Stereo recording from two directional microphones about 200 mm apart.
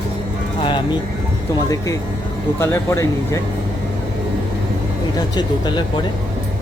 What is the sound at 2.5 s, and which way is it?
Speech, 15° left (ahead or behind).